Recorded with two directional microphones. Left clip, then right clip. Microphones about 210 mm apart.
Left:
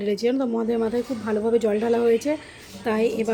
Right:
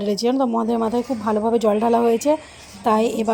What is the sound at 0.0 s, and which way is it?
A woman's voice, 20° right (ahead or behind).